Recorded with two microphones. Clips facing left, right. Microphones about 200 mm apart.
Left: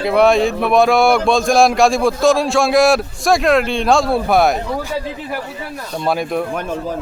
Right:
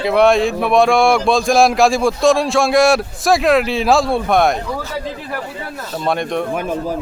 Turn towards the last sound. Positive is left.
turn(degrees=5)  # may be behind; listen again after turning